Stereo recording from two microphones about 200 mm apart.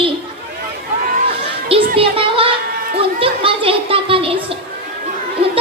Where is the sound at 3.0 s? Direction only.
25° right (ahead or behind).